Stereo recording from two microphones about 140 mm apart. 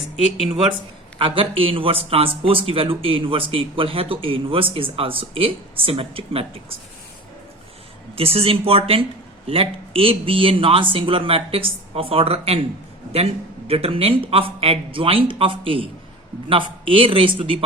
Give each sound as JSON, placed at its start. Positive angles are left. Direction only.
{"t": 0.4, "sound": "speech", "side_deg": -40}
{"t": 8.1, "sound": "speech", "side_deg": -45}
{"t": 13.7, "sound": "speech", "side_deg": -45}